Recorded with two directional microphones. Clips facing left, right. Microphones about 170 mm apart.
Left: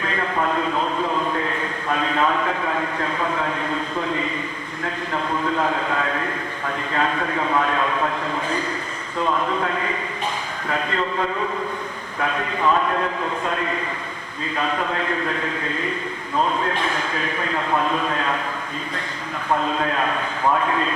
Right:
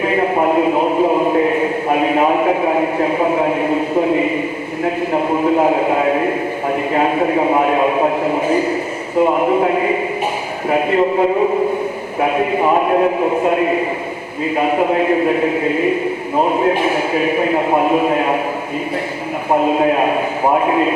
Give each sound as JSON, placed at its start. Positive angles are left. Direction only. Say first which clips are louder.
{"t": 0.0, "sound": "a sound", "louder": "right 9 dB", "side_deg": -15}
{"t": 0.9, "sound": "chant", "louder": "right 10 dB", "side_deg": -55}
{"t": 1.3, "sound": "a sound", "louder": "right 11 dB", "side_deg": -15}
{"t": 5.5, "sound": "a man's voice", "louder": "right 10 dB", "side_deg": -15}
{"t": 9.3, "sound": "a man's voice", "louder": "right 9 dB", "side_deg": -15}
{"t": 17.4, "sound": "a man's voice", "louder": "right 8 dB", "side_deg": -15}
{"t": 19.5, "sound": "a man's voice", "louder": "right 10 dB", "side_deg": -15}